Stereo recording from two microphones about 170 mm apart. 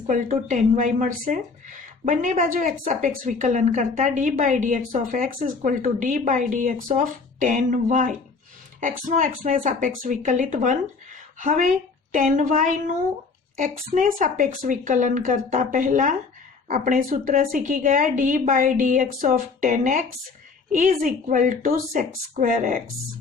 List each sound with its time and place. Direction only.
0.1 s a woman's voice: 50° right (ahead or behind)